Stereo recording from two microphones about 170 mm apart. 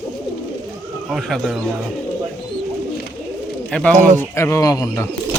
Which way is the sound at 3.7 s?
5° left (ahead or behind).